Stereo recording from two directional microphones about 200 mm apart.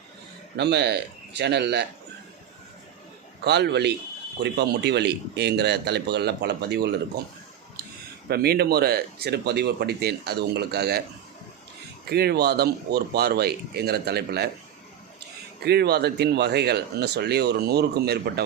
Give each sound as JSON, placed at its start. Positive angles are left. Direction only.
{"t": 0.5, "sound": "speech", "side_deg": -55}
{"t": 3.4, "sound": "speech", "side_deg": -55}
{"t": 8.3, "sound": "speech", "side_deg": -50}
{"t": 12.0, "sound": "speech", "side_deg": -50}
{"t": 15.6, "sound": "speech", "side_deg": -55}